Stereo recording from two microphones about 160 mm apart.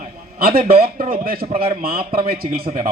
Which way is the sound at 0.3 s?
65° right (ahead or behind).